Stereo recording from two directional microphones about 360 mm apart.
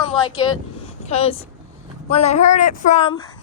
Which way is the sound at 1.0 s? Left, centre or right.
Centre.